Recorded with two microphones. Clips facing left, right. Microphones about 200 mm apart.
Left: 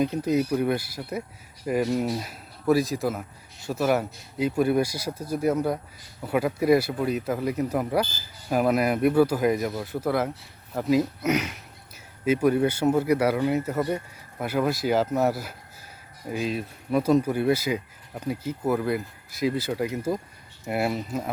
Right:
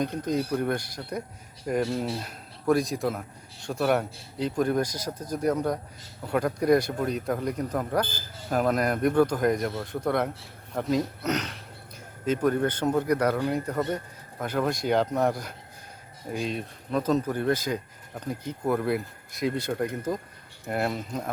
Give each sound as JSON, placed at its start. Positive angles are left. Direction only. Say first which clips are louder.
{"t": 0.0, "sound": "a man's voice", "louder": "left 4 dB", "side_deg": 10}